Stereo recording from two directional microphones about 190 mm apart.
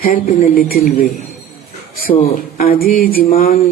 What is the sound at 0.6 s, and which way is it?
Speech, 50° left (ahead or behind).